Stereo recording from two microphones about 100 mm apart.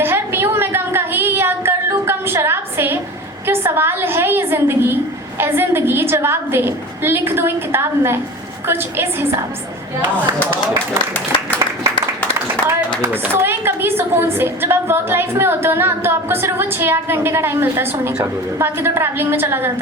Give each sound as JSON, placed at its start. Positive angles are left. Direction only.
{"t": 0.0, "sound": "a sound", "side_deg": -25}
{"t": 3.4, "sound": "a woman's voice", "side_deg": -25}
{"t": 12.6, "sound": "a woman's voice", "side_deg": -20}